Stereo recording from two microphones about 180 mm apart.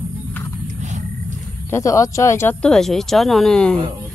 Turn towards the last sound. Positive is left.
turn(degrees=5)  # may be behind; listen again after turning